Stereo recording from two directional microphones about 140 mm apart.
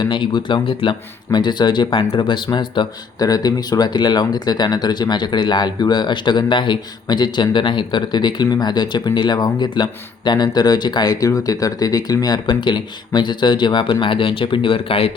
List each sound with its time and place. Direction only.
0.0 s speech: 35° left (ahead or behind)